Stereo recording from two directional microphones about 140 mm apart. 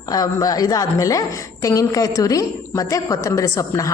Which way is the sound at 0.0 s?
25° left (ahead or behind).